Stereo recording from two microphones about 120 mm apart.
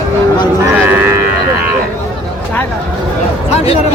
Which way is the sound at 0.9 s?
15° right (ahead or behind).